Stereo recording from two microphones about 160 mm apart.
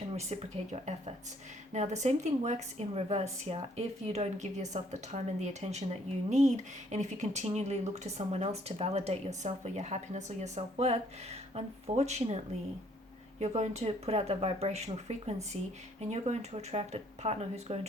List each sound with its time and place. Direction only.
0.1 s a woman's voice: 40° right (ahead or behind)
13.4 s speech: 45° right (ahead or behind)